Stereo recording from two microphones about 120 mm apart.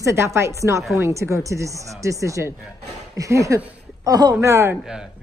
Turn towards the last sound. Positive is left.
turn(degrees=-5)  # may be behind; listen again after turning